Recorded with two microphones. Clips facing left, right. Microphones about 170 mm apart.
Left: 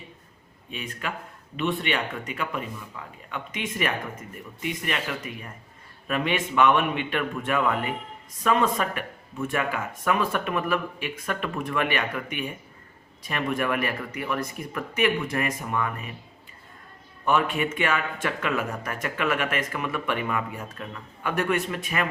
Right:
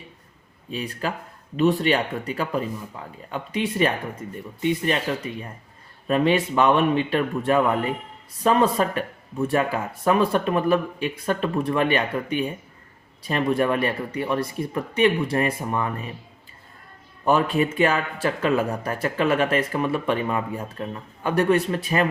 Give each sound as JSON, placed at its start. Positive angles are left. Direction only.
{"t": 0.7, "sound": "a man's voice", "side_deg": -35}
{"t": 17.2, "sound": "a man's voice", "side_deg": -35}